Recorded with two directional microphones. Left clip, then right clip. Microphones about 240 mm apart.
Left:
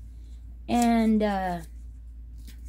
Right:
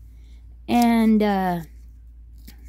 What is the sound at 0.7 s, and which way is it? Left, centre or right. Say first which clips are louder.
Speech: right 4 dB; right.